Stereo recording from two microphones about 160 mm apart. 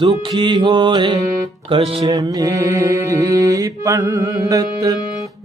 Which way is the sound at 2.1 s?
25° right (ahead or behind).